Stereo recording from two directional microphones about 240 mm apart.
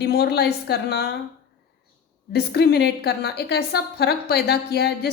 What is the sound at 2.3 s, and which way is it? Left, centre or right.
A woman's voice, left.